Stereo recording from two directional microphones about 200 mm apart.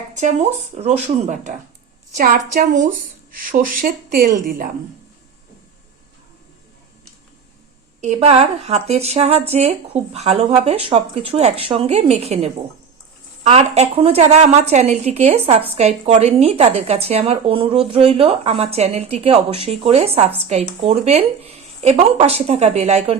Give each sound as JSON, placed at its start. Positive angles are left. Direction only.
{"t": 0.1, "sound": "a woman's voice", "side_deg": -35}
{"t": 8.0, "sound": "a woman's voice", "side_deg": -35}